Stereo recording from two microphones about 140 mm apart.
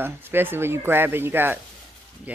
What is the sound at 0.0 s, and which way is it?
Speech, 15° right (ahead or behind).